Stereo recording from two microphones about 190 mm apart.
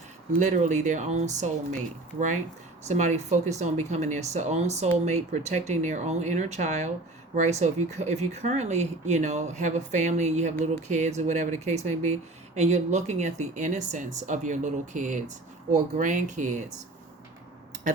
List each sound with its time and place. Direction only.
0.3 s speech: 40° right (ahead or behind)